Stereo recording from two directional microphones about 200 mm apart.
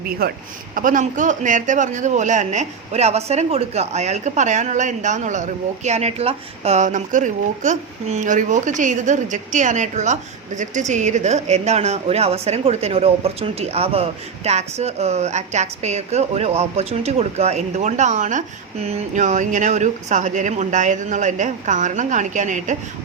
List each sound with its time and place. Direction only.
0.2 s a man's voice: 50° right (ahead or behind)